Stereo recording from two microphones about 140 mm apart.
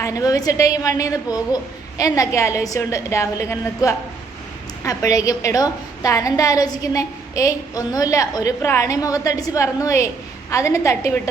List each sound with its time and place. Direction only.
0.0 s a woman's voice: 25° left (ahead or behind)